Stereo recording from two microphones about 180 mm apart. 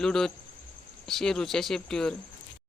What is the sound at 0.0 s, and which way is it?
Speech, 5° left (ahead or behind).